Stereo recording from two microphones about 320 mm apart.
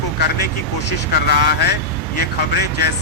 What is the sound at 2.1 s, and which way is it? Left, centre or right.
Speech, left.